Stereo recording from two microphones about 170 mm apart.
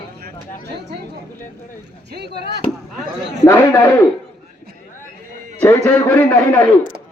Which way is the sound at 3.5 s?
15° left (ahead or behind).